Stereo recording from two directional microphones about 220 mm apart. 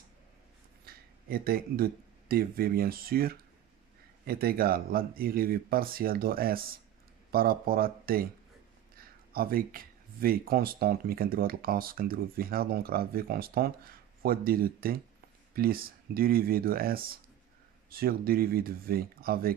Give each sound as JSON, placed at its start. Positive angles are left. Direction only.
{"t": 0.8, "sound": "speech", "side_deg": -40}